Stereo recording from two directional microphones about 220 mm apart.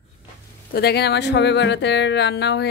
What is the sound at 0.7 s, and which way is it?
Speech, 45° left (ahead or behind).